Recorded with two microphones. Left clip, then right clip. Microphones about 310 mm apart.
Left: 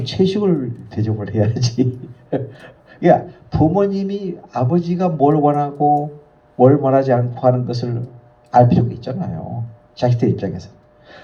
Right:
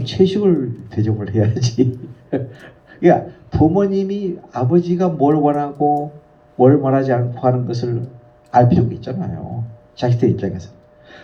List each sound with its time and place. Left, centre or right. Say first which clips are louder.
0.0 s a man's voice: right 2 dB; left